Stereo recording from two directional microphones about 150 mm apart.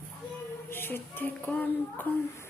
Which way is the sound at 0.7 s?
15° left (ahead or behind).